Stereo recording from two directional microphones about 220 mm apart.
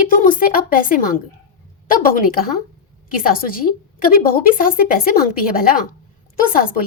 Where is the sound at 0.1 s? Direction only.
40° left (ahead or behind).